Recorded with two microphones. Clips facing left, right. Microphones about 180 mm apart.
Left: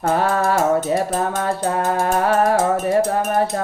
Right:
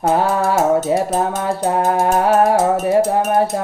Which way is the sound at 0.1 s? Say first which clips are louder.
Right 1 dB; 20° right (ahead or behind).